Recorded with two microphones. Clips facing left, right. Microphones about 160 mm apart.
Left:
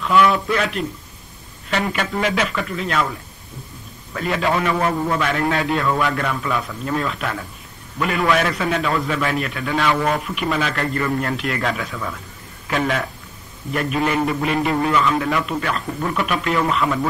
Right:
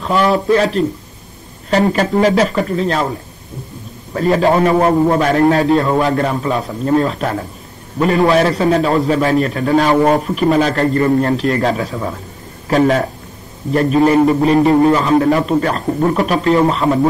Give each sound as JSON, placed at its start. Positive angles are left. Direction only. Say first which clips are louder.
{"t": 0.0, "sound": "a man's voice", "louder": "right 2 dB", "side_deg": -35}